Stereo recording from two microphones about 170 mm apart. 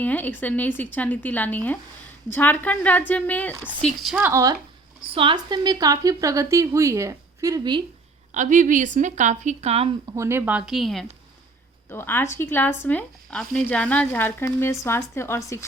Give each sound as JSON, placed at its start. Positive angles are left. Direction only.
{"t": 0.0, "sound": "a woman's voice", "side_deg": 10}
{"t": 4.1, "sound": "speech", "side_deg": -15}
{"t": 5.1, "sound": "a woman's voice", "side_deg": -30}
{"t": 8.3, "sound": "speech", "side_deg": -50}
{"t": 10.2, "sound": "speech", "side_deg": -15}
{"t": 11.9, "sound": "speech", "side_deg": 15}